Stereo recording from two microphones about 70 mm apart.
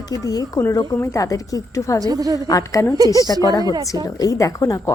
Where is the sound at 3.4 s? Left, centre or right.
Left.